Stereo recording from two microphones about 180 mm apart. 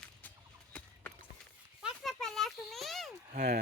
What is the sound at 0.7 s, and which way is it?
Clip-clop, 5° left (ahead or behind).